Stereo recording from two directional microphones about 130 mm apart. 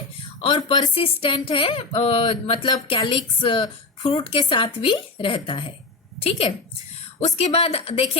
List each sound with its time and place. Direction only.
0.4 s a woman's voice: 35° left (ahead or behind)
7.2 s a woman's voice: 55° left (ahead or behind)